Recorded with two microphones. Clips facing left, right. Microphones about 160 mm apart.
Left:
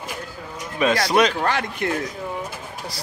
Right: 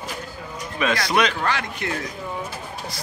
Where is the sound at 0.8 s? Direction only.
40° left (ahead or behind).